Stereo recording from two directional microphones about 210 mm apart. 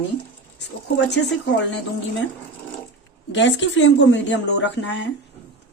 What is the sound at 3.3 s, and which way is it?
Speech, 60° left (ahead or behind).